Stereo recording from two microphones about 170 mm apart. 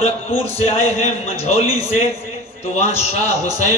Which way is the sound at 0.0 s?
35° left (ahead or behind).